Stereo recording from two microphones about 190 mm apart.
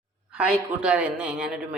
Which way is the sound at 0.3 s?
5° right (ahead or behind).